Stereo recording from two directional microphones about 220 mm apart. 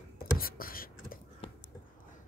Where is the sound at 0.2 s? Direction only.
40° left (ahead or behind).